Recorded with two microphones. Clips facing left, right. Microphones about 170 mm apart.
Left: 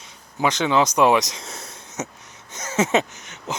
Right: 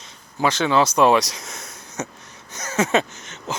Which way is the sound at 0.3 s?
15° left (ahead or behind).